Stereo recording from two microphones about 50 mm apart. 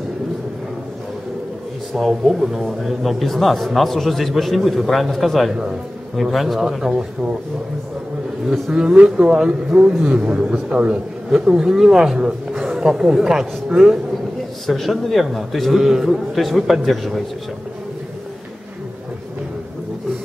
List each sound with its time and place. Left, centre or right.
2.0 s a man's voice: centre
8.5 s a man's voice: centre
11.2 s a man's voice: centre
14.7 s a man's voice: centre